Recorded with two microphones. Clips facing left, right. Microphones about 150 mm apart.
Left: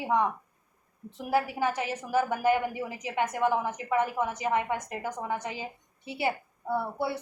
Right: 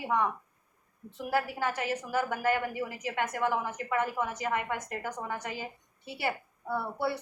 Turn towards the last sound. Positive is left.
turn(degrees=15)  # may be behind; listen again after turning